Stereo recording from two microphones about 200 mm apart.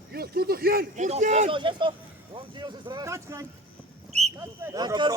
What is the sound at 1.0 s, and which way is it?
Speech, 35° right (ahead or behind).